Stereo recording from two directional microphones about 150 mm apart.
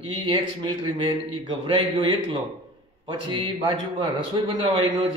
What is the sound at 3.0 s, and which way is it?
A man's voice, 35° right (ahead or behind).